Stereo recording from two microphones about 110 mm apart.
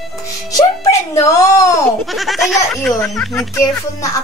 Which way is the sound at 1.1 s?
30° left (ahead or behind).